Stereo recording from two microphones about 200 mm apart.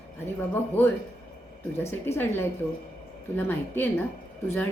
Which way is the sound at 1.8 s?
10° left (ahead or behind).